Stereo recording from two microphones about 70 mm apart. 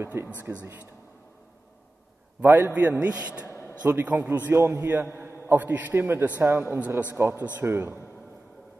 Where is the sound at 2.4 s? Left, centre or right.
Right.